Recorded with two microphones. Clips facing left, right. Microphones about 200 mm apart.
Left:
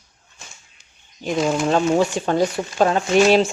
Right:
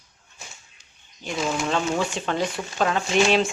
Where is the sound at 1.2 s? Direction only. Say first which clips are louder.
Left 6 dB; 40° left (ahead or behind).